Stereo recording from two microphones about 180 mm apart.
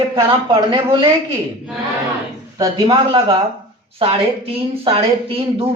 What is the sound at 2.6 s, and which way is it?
Speech, 20° right (ahead or behind).